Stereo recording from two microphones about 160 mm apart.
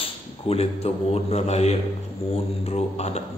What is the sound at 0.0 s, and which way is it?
A man's voice, 40° left (ahead or behind).